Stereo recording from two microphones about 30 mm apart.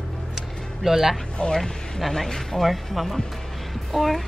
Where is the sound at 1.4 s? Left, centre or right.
Left.